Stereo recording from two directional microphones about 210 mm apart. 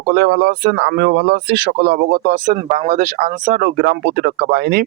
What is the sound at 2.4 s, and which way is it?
Speech, 35° right (ahead or behind).